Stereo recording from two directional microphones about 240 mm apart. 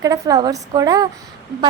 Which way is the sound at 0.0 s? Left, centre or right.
Centre.